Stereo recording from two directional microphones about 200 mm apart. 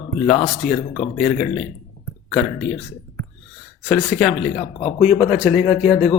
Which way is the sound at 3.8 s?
Centre (ahead or behind).